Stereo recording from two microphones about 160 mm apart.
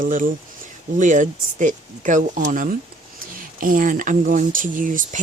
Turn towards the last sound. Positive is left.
turn(degrees=-55)  # may be behind; listen again after turning